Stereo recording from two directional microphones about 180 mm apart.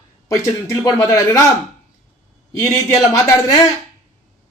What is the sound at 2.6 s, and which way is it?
Speech, 15° left (ahead or behind).